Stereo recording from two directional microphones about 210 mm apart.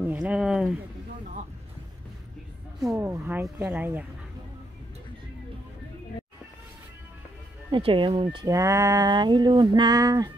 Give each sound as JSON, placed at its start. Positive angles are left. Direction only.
{"t": 0.0, "sound": "a sound", "side_deg": -5}
{"t": 2.9, "sound": "speech", "side_deg": -10}
{"t": 7.7, "sound": "speech", "side_deg": -25}